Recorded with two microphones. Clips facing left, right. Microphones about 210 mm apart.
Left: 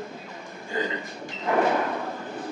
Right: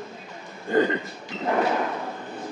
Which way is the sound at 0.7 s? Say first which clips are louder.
Right 9 dB; 60° right (ahead or behind).